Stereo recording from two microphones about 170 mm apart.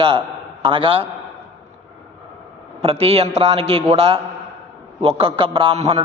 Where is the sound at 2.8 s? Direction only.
35° right (ahead or behind).